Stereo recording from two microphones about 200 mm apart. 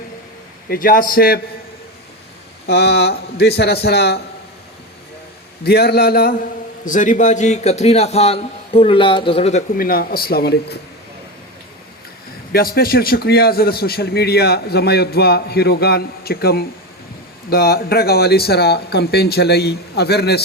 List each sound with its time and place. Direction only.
0.7 s a man's voice: 45° left (ahead or behind)
2.6 s a man's voice: 55° left (ahead or behind)
5.6 s a man's voice: 55° left (ahead or behind)
6.8 s a man's voice: 40° left (ahead or behind)
12.5 s a man's voice: 50° left (ahead or behind)